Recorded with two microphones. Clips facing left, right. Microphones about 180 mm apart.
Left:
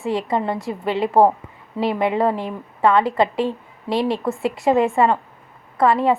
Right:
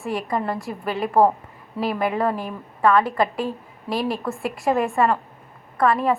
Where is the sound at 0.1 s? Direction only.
25° left (ahead or behind).